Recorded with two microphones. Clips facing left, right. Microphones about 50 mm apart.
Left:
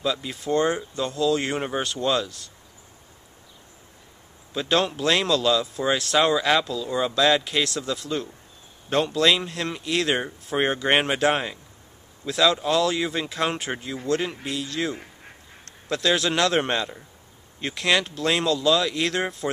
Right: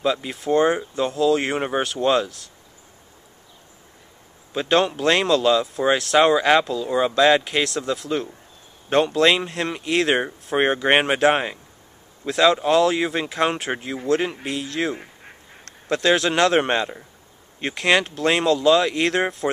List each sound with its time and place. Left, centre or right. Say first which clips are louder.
0.0 s speech: right 4 dB; centre
4.6 s speech: right 4 dB; centre